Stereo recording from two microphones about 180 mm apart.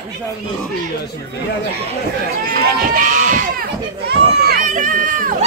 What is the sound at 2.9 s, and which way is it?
Crowd, 45° right (ahead or behind).